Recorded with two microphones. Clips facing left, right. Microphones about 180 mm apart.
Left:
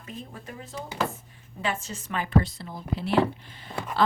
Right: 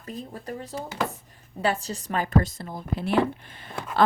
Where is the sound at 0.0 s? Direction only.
40° right (ahead or behind).